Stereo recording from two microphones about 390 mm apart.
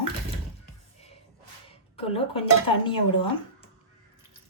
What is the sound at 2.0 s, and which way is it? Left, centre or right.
Speech, centre.